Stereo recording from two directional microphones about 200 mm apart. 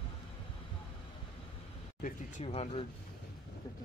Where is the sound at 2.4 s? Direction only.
30° left (ahead or behind).